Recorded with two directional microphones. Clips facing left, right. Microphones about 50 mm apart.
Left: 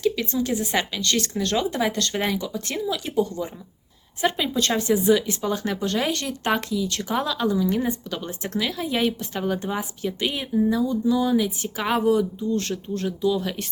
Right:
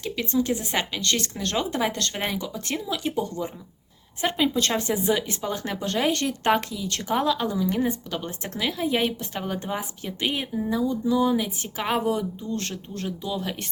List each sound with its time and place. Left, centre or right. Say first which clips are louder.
0.0 s speech: left 2 dB; right
4.2 s speech: even; right
7.1 s speech: right 1 dB; right
11.8 s speech: left 3 dB; centre
12.1 s speech: left 6 dB; right